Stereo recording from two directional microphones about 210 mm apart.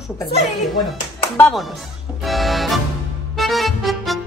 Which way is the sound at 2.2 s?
Centre (ahead or behind).